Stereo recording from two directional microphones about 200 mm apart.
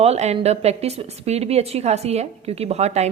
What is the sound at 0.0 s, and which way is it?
A woman's voice, 35° right (ahead or behind).